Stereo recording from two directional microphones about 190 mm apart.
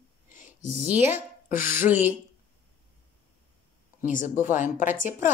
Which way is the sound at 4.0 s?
45° left (ahead or behind).